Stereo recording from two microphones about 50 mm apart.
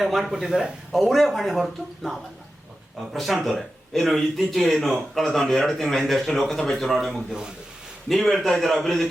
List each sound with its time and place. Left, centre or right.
0.0 s speech: centre
0.3 s speech: centre
0.9 s speech: centre
6.7 s speech: centre
7.3 s speech: centre
8.1 s speech: centre